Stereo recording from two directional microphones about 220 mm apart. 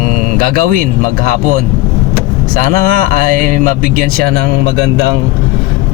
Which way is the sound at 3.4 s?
35° right (ahead or behind).